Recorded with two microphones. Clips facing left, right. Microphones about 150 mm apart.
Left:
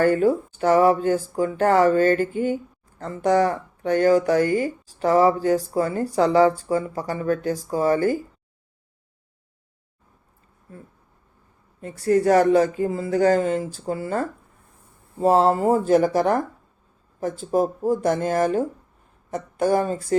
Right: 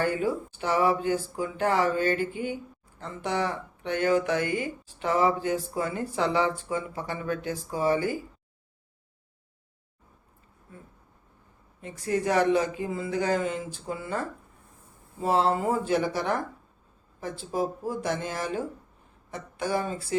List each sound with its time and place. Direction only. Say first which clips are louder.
0.0 s speech: left 8 dB; 45° left (ahead or behind)
11.8 s speech: left 9 dB; 40° left (ahead or behind)